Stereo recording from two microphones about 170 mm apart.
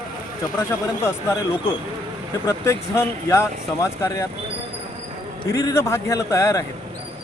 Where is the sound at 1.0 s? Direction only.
15° left (ahead or behind).